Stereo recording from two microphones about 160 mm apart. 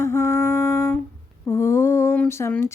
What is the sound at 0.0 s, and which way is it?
Music, 15° left (ahead or behind).